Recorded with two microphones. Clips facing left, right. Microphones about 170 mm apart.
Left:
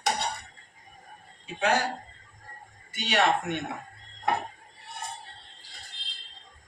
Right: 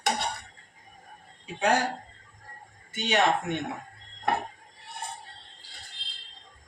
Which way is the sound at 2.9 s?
45° right (ahead or behind).